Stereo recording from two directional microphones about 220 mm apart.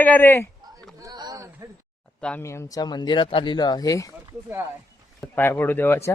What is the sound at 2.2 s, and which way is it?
Speech, 10° left (ahead or behind).